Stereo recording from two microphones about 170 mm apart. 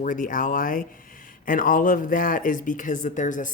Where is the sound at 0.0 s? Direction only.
50° left (ahead or behind).